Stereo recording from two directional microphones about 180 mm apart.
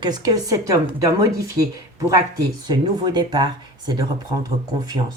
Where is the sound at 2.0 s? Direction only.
20° right (ahead or behind).